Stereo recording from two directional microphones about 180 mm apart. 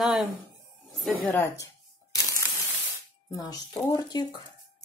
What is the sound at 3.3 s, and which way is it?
Speech, 20° left (ahead or behind).